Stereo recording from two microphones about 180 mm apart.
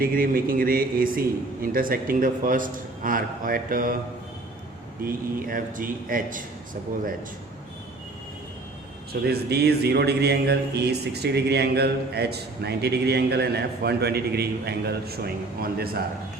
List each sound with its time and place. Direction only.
0.0 s a man's voice: 50° right (ahead or behind)
5.0 s a man's voice: 50° right (ahead or behind)
9.2 s speech: 65° right (ahead or behind)